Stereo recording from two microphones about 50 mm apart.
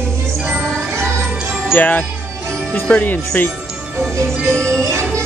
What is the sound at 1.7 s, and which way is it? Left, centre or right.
Speech, left.